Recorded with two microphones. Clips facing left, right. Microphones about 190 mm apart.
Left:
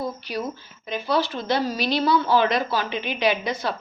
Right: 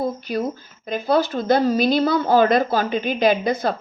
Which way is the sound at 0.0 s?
50° right (ahead or behind).